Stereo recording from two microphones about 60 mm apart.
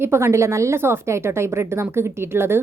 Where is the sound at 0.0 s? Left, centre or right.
Right.